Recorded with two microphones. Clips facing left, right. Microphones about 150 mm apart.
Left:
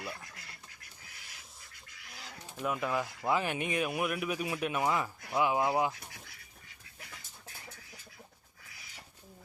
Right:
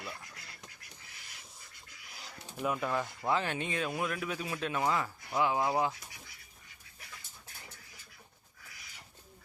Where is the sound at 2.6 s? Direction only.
Centre (ahead or behind).